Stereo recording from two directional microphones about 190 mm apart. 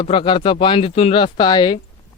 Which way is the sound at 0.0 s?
25° left (ahead or behind).